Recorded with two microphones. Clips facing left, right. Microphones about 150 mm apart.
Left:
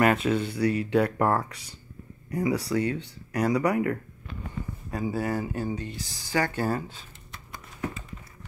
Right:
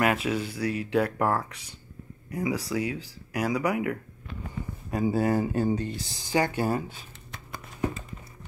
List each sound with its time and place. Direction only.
0.0 s speech: 5° right (ahead or behind)
4.9 s speech: 25° right (ahead or behind)